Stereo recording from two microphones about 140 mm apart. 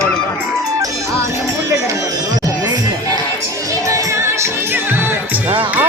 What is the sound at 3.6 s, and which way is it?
Music, 25° right (ahead or behind).